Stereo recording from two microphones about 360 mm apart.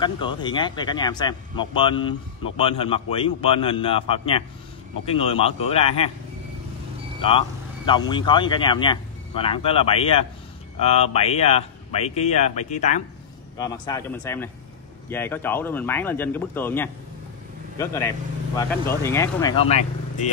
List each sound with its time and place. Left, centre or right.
0.0 s speech: centre
7.2 s speech: centre